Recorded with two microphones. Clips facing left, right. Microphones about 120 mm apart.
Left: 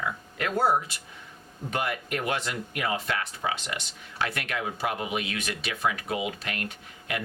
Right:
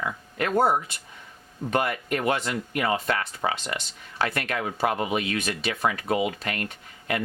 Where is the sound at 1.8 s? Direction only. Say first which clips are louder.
Right 4 dB; 40° right (ahead or behind).